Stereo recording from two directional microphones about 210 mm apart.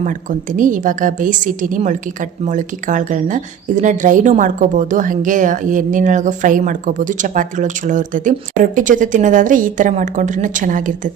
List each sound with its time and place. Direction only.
0.0 s a woman's voice: 40° right (ahead or behind)